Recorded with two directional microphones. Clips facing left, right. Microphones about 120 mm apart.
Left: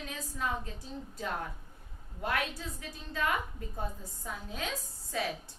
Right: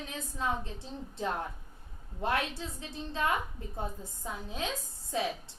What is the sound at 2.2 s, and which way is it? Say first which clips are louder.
A woman's voice: right 2 dB; 25° right (ahead or behind).